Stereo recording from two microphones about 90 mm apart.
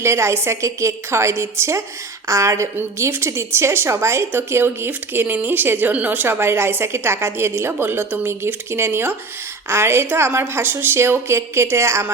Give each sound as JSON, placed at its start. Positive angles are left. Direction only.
{"t": 0.0, "sound": "a woman's voice", "side_deg": -30}